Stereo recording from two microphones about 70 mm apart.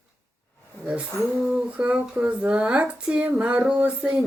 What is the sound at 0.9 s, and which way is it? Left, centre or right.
Speech, centre.